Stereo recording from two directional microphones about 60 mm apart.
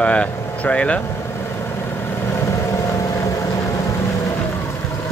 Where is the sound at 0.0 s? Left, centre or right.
Centre.